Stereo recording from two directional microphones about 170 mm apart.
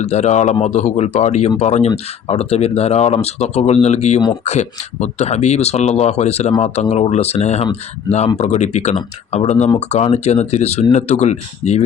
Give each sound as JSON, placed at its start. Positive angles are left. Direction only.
{"t": 0.0, "sound": "speech", "side_deg": 40}